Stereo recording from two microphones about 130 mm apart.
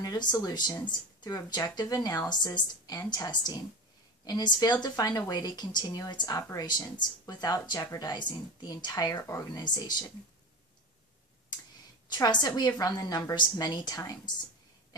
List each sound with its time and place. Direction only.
0.0 s speech: 30° left (ahead or behind)
12.1 s speech: 30° left (ahead or behind)